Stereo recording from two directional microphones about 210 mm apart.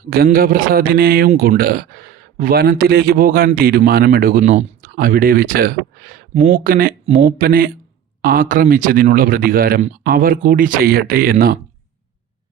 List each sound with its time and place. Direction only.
0.1 s speech: 45° right (ahead or behind)